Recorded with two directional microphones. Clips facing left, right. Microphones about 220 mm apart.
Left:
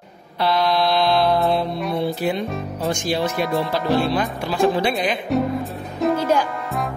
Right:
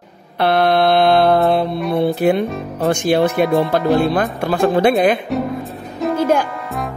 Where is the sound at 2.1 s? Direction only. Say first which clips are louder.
Right 7 dB; 55° right (ahead or behind).